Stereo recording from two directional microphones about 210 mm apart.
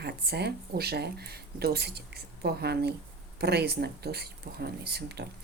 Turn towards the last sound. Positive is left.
turn(degrees=-50)  # may be behind; listen again after turning